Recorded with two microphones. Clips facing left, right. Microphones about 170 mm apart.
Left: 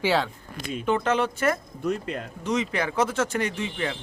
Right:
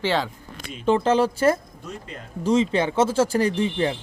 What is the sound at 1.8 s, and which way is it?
Speech, 65° left (ahead or behind).